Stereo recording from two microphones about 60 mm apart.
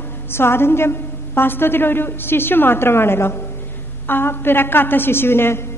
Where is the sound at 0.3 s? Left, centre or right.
Left.